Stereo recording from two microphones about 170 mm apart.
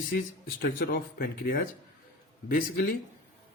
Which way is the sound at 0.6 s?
60° left (ahead or behind).